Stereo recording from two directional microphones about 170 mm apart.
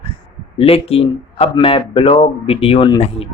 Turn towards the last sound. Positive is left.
turn(degrees=30)  # may be behind; listen again after turning